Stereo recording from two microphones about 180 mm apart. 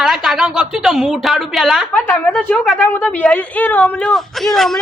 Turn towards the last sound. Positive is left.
turn(degrees=0)  # may be behind; listen again after turning